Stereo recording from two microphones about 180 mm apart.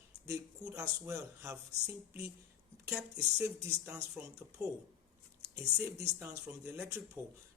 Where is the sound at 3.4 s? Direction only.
10° right (ahead or behind).